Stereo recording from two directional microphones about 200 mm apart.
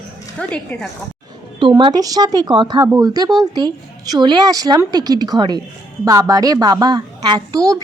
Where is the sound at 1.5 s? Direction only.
25° right (ahead or behind).